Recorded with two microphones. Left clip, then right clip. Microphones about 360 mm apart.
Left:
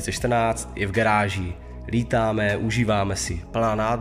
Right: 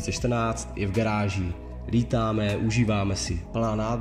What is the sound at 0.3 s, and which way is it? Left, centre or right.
A man's voice, centre.